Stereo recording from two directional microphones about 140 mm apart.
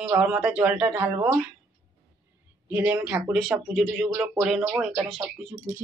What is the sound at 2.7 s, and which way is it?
Speech, 15° right (ahead or behind).